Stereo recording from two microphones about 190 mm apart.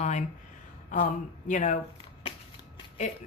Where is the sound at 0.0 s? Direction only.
40° left (ahead or behind).